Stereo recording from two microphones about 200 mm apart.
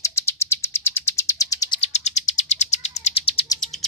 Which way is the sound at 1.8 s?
35° left (ahead or behind).